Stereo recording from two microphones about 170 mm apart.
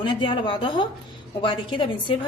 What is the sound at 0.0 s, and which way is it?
A woman's voice, 25° left (ahead or behind).